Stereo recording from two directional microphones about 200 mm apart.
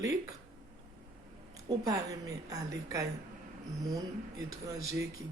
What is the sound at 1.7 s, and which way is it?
Speech, 20° right (ahead or behind).